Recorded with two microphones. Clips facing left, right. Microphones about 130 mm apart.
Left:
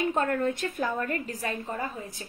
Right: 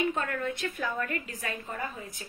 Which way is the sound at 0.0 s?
40° left (ahead or behind).